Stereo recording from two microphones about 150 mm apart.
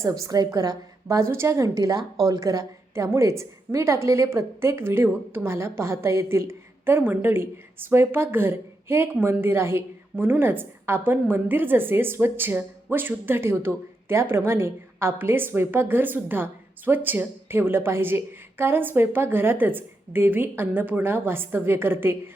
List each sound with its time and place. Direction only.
0.0 s a woman's voice: 20° right (ahead or behind)